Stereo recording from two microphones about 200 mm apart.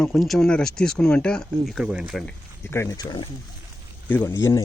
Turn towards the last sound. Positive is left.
turn(degrees=15)  # may be behind; listen again after turning